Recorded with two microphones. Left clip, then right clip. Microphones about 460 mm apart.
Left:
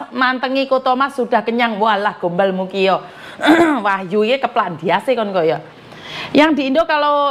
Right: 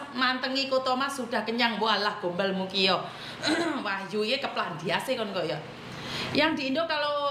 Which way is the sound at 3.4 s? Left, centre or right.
Left.